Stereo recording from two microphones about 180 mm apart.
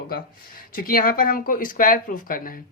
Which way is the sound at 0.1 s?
55° left (ahead or behind).